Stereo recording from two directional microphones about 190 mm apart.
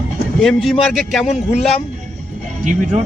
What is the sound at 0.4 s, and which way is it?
Speech, centre (ahead or behind).